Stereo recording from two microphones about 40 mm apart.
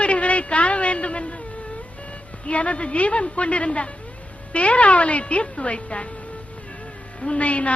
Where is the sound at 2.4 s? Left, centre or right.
Left.